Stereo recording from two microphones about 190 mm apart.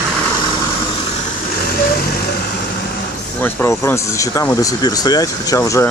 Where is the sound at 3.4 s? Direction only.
15° left (ahead or behind).